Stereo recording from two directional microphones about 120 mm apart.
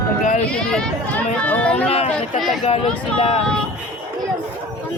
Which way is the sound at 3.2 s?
55° left (ahead or behind).